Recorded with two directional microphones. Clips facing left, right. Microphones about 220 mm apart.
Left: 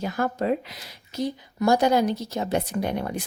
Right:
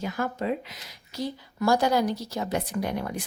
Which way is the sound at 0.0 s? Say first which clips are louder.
Left 3 dB; 40° left (ahead or behind).